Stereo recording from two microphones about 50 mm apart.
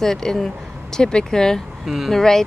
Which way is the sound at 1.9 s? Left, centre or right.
Centre.